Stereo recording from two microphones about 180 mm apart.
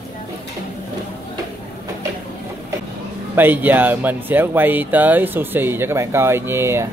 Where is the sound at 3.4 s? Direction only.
10° right (ahead or behind).